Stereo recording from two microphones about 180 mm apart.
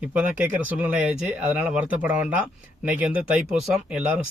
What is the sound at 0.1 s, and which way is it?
Speech, 10° right (ahead or behind).